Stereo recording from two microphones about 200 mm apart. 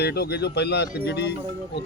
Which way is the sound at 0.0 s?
55° left (ahead or behind).